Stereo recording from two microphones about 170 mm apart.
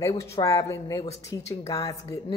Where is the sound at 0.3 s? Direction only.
15° left (ahead or behind).